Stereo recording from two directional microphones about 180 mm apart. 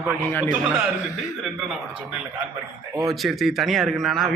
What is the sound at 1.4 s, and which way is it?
Speech, centre (ahead or behind).